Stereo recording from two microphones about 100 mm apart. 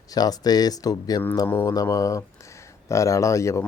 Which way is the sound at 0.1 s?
40° left (ahead or behind).